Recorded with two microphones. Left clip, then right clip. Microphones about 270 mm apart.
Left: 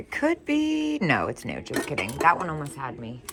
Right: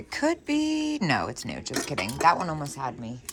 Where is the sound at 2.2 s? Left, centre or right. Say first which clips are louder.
Even; centre.